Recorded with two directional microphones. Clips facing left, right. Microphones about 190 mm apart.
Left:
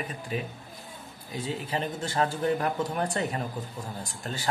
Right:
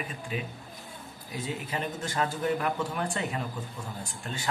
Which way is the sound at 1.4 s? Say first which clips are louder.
Left 2 dB; 30° left (ahead or behind).